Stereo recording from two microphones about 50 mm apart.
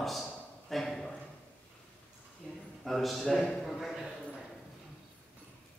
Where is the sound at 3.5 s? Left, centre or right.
Centre.